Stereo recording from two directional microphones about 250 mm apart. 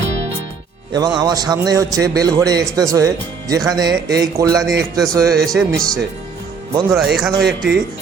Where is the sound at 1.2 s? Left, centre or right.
Centre.